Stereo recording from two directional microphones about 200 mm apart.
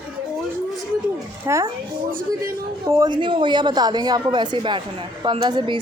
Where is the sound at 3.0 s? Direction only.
25° right (ahead or behind).